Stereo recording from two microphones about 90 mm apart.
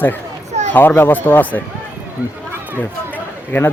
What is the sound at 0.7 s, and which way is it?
Speech, 25° left (ahead or behind).